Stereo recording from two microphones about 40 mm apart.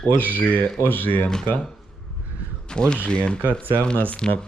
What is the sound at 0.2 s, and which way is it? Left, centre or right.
Speech, left.